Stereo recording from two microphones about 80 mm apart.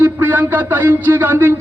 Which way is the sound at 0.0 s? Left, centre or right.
Right.